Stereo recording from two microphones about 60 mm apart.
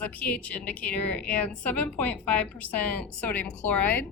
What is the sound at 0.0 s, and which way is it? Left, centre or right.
A woman's voice, left.